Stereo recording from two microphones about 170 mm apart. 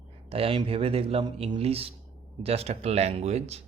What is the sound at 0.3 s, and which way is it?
Speech, 35° right (ahead or behind).